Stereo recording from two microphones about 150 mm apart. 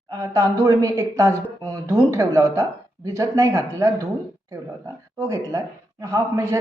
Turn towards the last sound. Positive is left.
turn(degrees=-20)  # may be behind; listen again after turning